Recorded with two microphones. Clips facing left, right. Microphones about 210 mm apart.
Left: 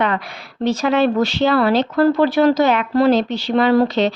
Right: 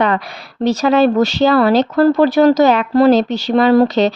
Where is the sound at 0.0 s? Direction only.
40° right (ahead or behind).